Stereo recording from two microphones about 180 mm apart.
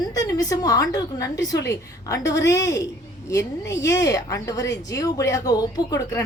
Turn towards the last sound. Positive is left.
turn(degrees=15)  # may be behind; listen again after turning